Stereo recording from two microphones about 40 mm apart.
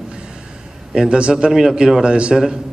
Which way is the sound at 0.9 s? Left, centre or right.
Right.